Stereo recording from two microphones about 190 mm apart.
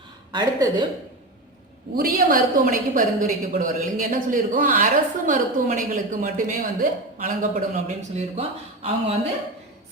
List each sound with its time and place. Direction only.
0.3 s speech: 20° right (ahead or behind)
2.0 s a woman's voice: 50° right (ahead or behind); by 9.1 s 30° right (ahead or behind)